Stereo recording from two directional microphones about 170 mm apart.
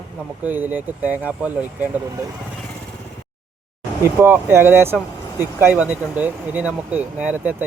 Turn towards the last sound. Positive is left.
turn(degrees=-10)  # may be behind; listen again after turning